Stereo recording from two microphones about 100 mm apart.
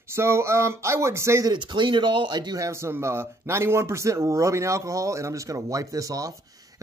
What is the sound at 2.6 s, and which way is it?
Speech, 25° right (ahead or behind).